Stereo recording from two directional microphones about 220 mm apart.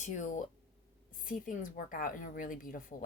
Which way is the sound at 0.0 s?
35° left (ahead or behind).